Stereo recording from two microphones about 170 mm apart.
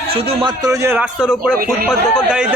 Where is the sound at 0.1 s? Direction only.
35° right (ahead or behind).